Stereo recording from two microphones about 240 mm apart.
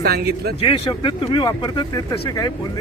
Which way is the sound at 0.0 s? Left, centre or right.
Right.